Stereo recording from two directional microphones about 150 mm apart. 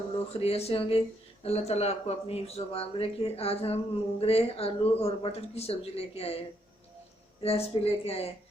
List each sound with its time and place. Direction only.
0.3 s speech: 40° left (ahead or behind)
7.4 s speech: 40° left (ahead or behind)